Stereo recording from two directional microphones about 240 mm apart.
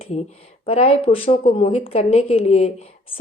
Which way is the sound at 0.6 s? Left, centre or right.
Left.